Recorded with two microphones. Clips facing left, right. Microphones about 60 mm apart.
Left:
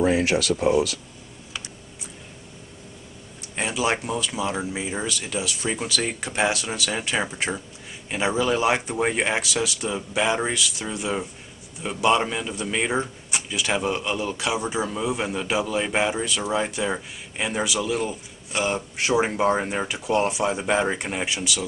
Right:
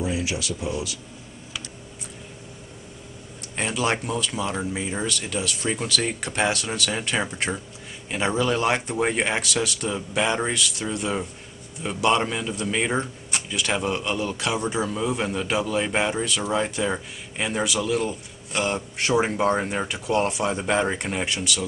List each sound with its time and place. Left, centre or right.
0.0 s speech: left
3.5 s speech: centre